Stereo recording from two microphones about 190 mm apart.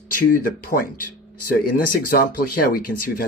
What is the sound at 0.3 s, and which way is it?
Speech, 50° left (ahead or behind).